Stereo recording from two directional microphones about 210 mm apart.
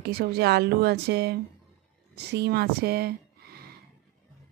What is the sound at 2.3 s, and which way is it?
Speech, 50° right (ahead or behind).